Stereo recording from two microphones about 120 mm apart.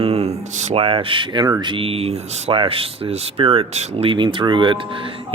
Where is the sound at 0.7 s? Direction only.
50° right (ahead or behind).